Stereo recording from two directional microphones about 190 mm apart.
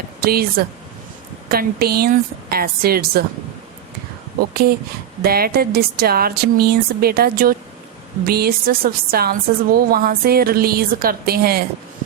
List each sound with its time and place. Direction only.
0.2 s a woman's voice: 55° right (ahead or behind)
5.2 s a woman's voice: 55° right (ahead or behind)